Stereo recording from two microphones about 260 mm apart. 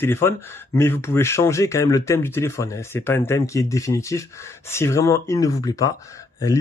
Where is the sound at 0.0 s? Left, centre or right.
Centre.